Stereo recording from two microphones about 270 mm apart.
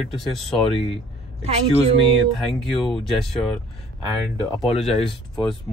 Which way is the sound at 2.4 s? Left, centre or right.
Centre.